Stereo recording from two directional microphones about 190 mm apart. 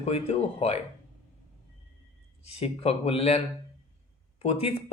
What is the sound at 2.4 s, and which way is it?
Speech, 30° left (ahead or behind).